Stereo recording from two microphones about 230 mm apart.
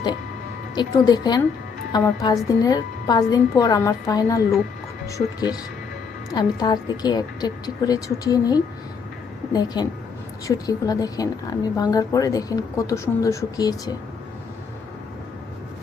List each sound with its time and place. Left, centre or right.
0.8 s a woman's voice: centre